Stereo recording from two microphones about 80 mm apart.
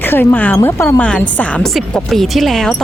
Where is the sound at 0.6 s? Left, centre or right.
Left.